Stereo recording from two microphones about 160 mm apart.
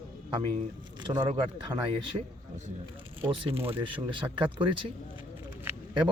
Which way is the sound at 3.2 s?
35° right (ahead or behind).